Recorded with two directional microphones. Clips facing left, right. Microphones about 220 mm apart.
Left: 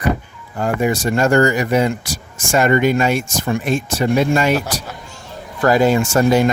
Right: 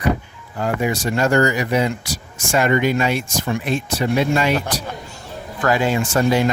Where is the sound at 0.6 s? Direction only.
45° left (ahead or behind).